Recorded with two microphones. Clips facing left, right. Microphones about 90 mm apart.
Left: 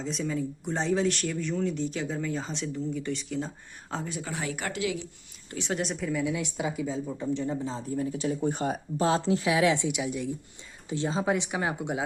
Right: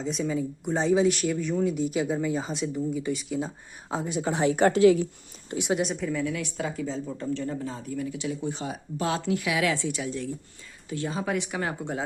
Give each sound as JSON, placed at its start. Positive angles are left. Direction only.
{"t": 0.0, "sound": "speech", "side_deg": -5}
{"t": 5.5, "sound": "a woman's voice", "side_deg": -15}
{"t": 6.2, "sound": "a woman's voice", "side_deg": 15}
{"t": 7.3, "sound": "speech", "side_deg": 20}
{"t": 9.0, "sound": "a woman's voice", "side_deg": 30}
{"t": 10.8, "sound": "a woman's voice", "side_deg": 25}